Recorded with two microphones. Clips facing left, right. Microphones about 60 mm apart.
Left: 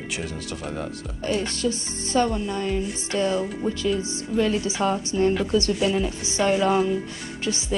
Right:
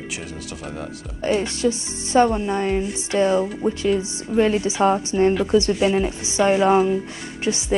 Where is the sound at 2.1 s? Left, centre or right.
Right.